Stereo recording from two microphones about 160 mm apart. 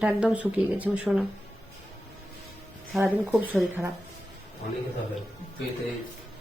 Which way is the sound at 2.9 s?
10° right (ahead or behind).